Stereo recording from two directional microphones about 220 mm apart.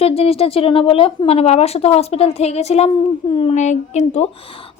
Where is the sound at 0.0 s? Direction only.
25° left (ahead or behind).